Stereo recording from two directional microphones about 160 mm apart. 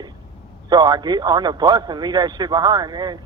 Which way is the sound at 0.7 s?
25° right (ahead or behind).